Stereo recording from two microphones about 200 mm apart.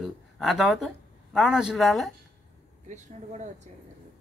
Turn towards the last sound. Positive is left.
turn(degrees=-35)  # may be behind; listen again after turning